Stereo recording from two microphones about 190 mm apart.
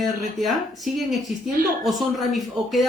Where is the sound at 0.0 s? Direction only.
Centre (ahead or behind).